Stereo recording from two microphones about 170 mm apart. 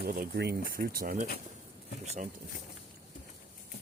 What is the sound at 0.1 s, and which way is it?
Speech, 65° right (ahead or behind).